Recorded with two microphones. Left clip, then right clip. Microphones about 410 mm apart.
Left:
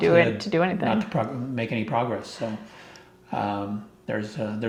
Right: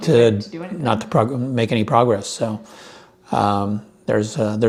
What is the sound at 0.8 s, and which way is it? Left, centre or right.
Speech, right.